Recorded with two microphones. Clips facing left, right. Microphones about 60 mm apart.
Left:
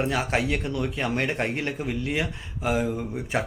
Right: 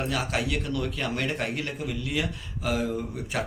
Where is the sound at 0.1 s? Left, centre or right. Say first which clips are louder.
Left 3 dB; left.